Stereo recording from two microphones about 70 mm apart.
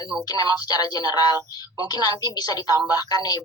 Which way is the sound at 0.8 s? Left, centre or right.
Left.